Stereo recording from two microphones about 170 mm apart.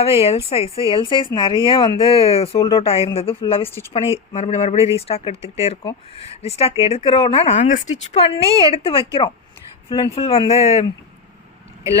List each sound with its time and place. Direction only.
0.0 s speech: 35° left (ahead or behind)